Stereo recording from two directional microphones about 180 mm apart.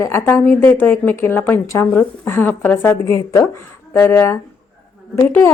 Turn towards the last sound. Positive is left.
turn(degrees=15)  # may be behind; listen again after turning